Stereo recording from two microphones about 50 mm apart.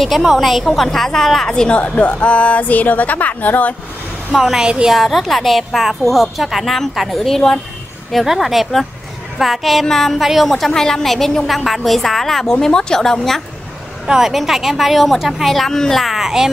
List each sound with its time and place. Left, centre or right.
0.0 s a woman's voice: centre
1.8 s a woman's voice: left
4.3 s a woman's voice: centre
14.0 s a woman's voice: centre